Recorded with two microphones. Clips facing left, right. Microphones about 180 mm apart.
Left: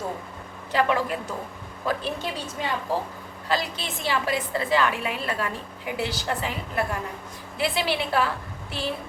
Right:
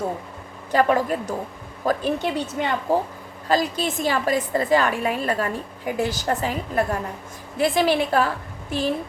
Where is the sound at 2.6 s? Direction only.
60° right (ahead or behind).